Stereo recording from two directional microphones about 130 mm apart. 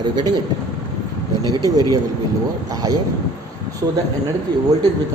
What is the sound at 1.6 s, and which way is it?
A man's voice, 30° right (ahead or behind).